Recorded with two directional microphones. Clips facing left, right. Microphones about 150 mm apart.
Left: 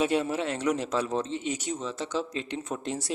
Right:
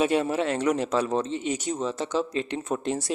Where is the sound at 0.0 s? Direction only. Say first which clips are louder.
Right 3 dB; 60° right (ahead or behind).